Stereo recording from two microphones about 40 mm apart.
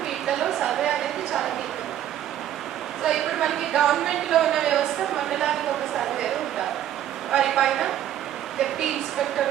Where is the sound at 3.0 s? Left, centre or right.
Centre.